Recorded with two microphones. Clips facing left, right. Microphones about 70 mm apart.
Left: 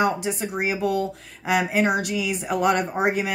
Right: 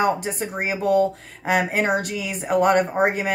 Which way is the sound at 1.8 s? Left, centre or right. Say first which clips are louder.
Even; right.